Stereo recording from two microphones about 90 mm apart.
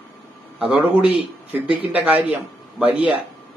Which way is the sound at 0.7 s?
15° right (ahead or behind).